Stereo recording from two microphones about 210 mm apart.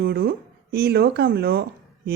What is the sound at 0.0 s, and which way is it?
Speech, 45° right (ahead or behind).